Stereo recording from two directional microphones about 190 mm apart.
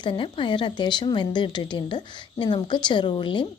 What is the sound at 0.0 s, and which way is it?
A woman's voice, 25° left (ahead or behind).